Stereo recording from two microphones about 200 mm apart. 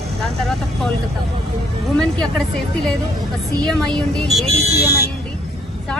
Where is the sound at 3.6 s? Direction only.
Centre (ahead or behind).